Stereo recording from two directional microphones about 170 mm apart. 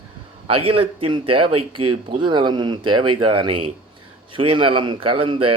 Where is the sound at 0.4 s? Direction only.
35° right (ahead or behind).